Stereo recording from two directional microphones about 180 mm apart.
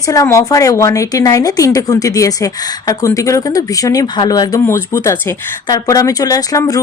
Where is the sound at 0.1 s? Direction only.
20° left (ahead or behind).